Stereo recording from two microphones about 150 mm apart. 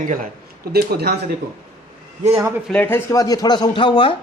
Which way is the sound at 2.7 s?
10° left (ahead or behind).